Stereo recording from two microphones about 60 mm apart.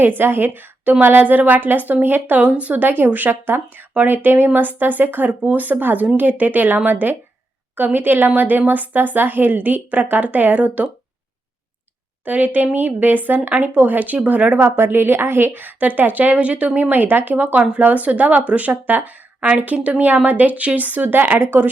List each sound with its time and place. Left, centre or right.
0.0 s a woman's voice: right
12.2 s a woman's voice: right